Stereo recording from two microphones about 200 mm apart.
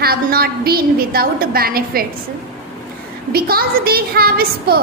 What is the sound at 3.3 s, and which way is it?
A woman's voice, 50° right (ahead or behind).